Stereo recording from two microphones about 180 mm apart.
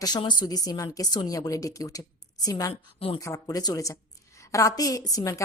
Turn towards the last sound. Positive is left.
turn(degrees=20)  # may be behind; listen again after turning